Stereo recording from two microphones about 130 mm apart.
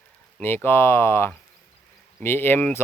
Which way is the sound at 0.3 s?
15° left (ahead or behind).